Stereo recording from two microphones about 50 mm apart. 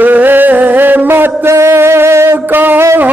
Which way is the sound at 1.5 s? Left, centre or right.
Right.